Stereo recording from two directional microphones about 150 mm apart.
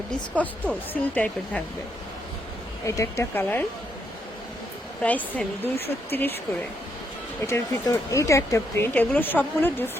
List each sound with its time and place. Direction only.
0.3 s speech: 10° left (ahead or behind)
2.8 s speech: 20° left (ahead or behind)
5.0 s speech: 10° left (ahead or behind)
7.4 s speech: 20° left (ahead or behind)